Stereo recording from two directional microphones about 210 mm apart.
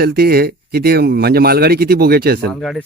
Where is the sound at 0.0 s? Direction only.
50° right (ahead or behind).